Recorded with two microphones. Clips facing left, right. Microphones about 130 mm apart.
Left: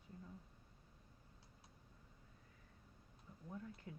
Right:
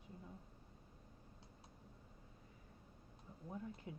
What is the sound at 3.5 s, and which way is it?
Speech, 20° right (ahead or behind).